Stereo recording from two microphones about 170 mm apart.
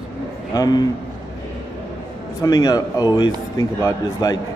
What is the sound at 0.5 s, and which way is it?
Speech, 25° left (ahead or behind).